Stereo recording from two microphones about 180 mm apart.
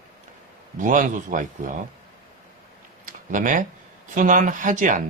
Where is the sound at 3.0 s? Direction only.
50° right (ahead or behind).